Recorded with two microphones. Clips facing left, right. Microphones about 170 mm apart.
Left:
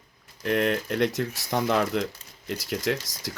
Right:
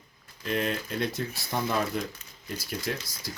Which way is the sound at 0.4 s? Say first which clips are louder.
Left 5 dB; 65° left (ahead or behind).